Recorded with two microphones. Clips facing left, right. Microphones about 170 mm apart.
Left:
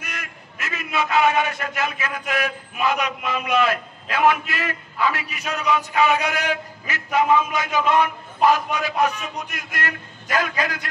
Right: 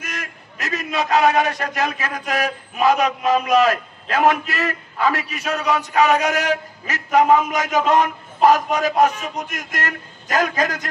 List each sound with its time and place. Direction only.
0.0 s a man's voice: 40° right (ahead or behind)